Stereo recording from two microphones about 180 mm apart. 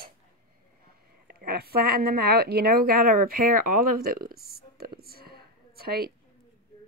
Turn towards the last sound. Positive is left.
turn(degrees=-55)  # may be behind; listen again after turning